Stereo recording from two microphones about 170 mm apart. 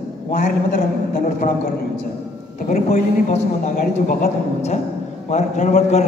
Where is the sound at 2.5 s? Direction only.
50° left (ahead or behind).